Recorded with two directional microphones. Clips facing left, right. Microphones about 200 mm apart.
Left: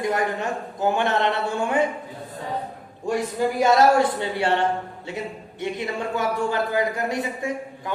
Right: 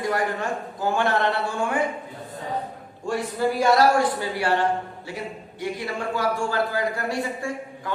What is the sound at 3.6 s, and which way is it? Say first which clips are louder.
A man's voice: left 2 dB; 20° left (ahead or behind).